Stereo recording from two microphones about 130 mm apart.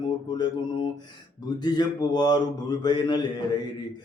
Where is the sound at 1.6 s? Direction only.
30° left (ahead or behind).